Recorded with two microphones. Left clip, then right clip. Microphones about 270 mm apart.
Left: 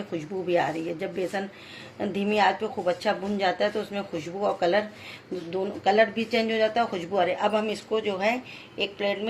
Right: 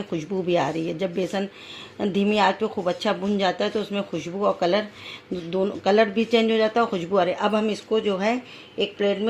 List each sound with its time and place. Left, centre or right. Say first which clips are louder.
0.1 s speech: right 3 dB; right
5.5 s speech: right 3 dB; right